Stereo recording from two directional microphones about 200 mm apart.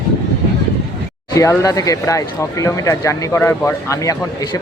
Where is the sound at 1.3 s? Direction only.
15° left (ahead or behind).